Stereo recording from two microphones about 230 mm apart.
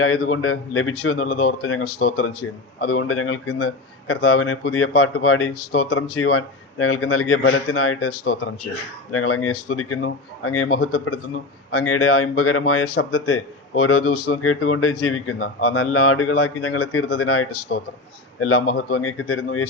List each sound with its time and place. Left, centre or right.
0.0 s a man's voice: left